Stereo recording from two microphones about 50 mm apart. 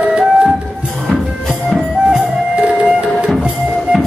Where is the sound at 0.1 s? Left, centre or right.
Centre.